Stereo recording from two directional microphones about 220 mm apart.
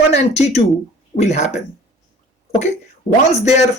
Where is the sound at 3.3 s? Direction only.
30° left (ahead or behind).